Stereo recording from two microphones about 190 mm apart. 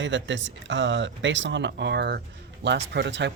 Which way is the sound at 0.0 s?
75° right (ahead or behind).